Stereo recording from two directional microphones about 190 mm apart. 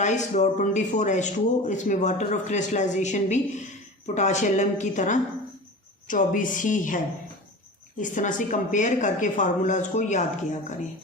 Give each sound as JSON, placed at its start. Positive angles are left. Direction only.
{"t": 0.3, "sound": "a woman's voice", "side_deg": 40}